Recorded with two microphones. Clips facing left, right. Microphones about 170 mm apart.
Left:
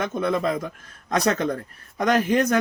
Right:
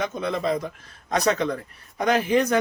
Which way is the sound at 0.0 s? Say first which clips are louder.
Left 2 dB; 55° left (ahead or behind).